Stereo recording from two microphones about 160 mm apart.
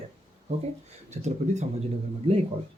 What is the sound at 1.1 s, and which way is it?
Speech, 45° right (ahead or behind).